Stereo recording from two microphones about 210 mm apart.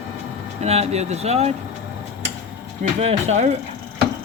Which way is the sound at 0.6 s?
30° right (ahead or behind).